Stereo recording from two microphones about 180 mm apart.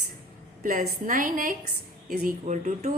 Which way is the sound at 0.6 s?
45° right (ahead or behind).